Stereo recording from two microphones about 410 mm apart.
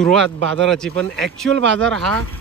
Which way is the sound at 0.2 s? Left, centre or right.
Right.